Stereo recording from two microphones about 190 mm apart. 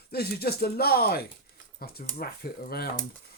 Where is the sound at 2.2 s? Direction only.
55° left (ahead or behind).